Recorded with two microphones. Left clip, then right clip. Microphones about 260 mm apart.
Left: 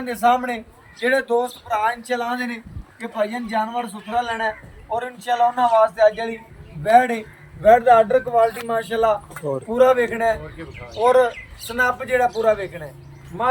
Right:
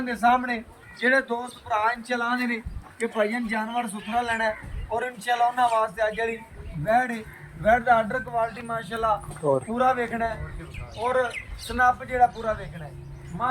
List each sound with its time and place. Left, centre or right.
0.0 s a man's voice: left
9.4 s speech: centre
9.7 s a man's voice: left